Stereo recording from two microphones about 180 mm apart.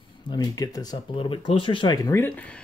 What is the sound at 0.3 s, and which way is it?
Speech, 20° left (ahead or behind).